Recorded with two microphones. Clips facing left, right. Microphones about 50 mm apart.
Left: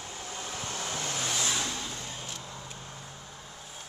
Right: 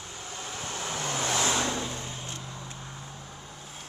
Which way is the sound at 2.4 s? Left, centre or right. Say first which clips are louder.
Right 2 dB; centre.